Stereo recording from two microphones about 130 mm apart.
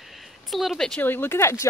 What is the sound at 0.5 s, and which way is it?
Speech, centre (ahead or behind).